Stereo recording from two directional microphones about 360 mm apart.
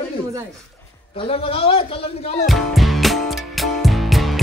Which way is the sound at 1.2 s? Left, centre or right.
Centre.